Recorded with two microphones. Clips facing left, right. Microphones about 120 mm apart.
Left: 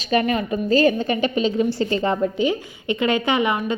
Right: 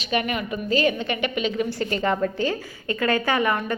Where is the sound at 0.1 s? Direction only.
35° left (ahead or behind).